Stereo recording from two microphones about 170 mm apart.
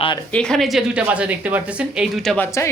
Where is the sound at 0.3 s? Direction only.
5° left (ahead or behind).